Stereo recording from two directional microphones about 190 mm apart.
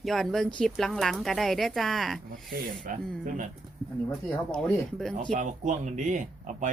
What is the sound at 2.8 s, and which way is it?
Speech, 45° right (ahead or behind).